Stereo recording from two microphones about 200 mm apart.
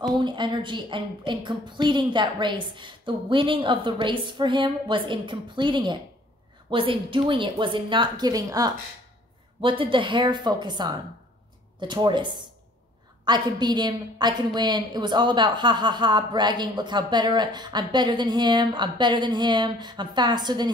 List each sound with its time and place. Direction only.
0.0 s a woman's voice: 25° right (ahead or behind)